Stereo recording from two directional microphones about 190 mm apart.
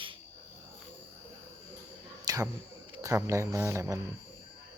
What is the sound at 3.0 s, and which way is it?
Speech, 15° right (ahead or behind).